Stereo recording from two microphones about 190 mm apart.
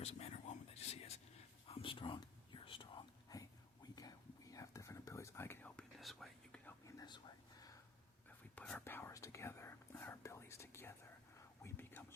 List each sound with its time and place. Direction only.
0.0 s a sound: 35° left (ahead or behind)
1.7 s whispering: 25° left (ahead or behind); by 6.7 s 5° left (ahead or behind)
6.8 s whispering: 20° left (ahead or behind)
8.5 s whispering: 10° left (ahead or behind)